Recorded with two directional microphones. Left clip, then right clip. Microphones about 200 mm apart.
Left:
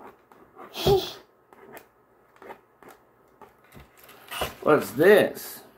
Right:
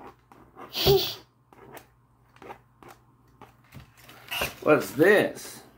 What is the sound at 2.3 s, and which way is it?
Scissors, 15° left (ahead or behind).